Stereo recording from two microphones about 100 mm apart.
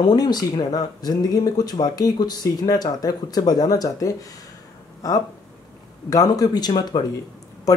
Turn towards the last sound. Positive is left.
turn(degrees=35)  # may be behind; listen again after turning